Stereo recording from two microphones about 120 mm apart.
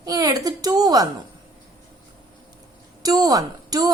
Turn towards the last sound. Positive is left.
turn(degrees=-30)  # may be behind; listen again after turning